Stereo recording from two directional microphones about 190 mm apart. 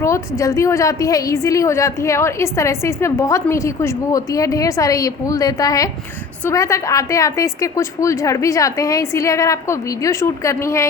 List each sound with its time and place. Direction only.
0.0 s a woman's voice: 15° left (ahead or behind)